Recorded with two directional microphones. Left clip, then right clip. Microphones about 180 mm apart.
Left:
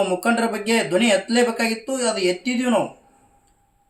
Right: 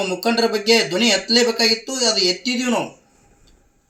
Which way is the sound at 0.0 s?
5° left (ahead or behind).